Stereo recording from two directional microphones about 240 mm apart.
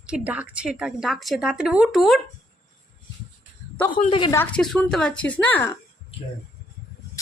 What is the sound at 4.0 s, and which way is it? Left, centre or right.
Speech, left.